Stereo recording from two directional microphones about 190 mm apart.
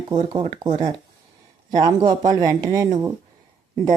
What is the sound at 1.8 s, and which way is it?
A woman's voice, 25° right (ahead or behind).